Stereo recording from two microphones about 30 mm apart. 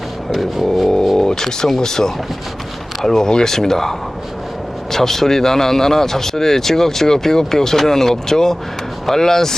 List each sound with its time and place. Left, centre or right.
0.6 s speech: centre
1.1 s speech: centre